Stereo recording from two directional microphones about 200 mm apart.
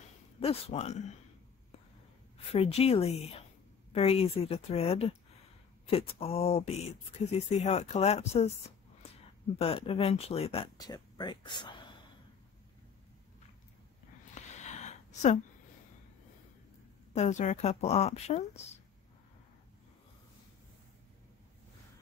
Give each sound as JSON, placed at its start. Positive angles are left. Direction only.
{"t": 0.4, "sound": "speech", "side_deg": 30}
{"t": 2.3, "sound": "speech", "side_deg": 30}
{"t": 14.3, "sound": "a sound", "side_deg": 35}
{"t": 17.1, "sound": "speech", "side_deg": 35}